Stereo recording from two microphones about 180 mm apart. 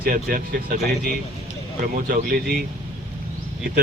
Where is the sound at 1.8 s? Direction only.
50° right (ahead or behind).